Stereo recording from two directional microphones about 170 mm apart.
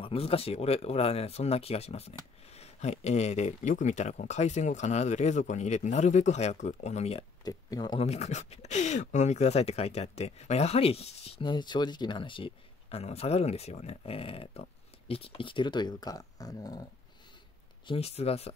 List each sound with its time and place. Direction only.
0.0 s speech: 35° left (ahead or behind)
7.4 s speech: 25° left (ahead or behind)
8.1 s speech: 40° left (ahead or behind); by 16.8 s 20° left (ahead or behind)
17.8 s speech: 35° left (ahead or behind)